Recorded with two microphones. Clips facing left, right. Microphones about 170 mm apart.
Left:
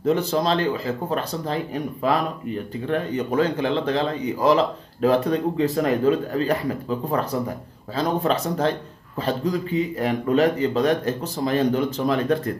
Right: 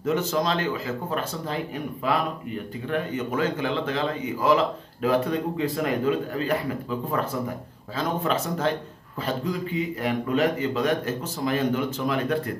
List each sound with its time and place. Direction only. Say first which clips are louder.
0.0 s speech: left 3 dB; 35° left (ahead or behind)
7.9 s speech: left 4 dB; 35° left (ahead or behind)